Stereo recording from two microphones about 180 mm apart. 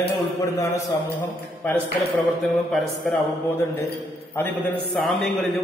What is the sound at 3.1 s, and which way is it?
A man's voice, 15° left (ahead or behind).